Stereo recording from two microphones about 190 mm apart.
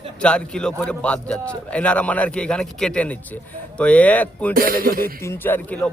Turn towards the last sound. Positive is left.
turn(degrees=10)  # may be behind; listen again after turning